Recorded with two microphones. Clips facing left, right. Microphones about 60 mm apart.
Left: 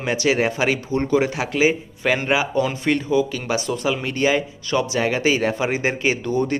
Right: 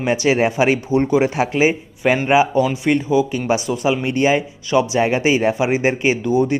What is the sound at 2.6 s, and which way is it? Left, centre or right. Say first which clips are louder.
Speech: right 4 dB; centre.